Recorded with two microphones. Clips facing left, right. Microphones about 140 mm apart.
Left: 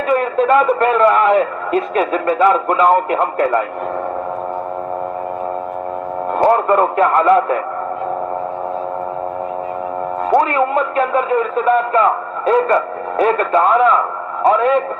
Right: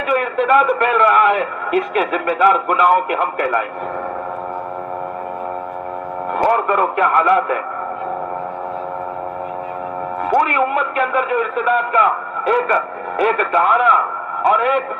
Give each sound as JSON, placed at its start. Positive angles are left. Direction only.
{"t": 0.1, "sound": "a man's voice", "side_deg": 30}
{"t": 6.3, "sound": "a man's voice", "side_deg": 30}
{"t": 10.2, "sound": "a man's voice", "side_deg": 30}